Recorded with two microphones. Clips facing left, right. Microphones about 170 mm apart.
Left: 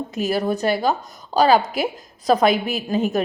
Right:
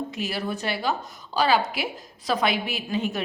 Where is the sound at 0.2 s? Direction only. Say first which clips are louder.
Left 11 dB; 45° left (ahead or behind).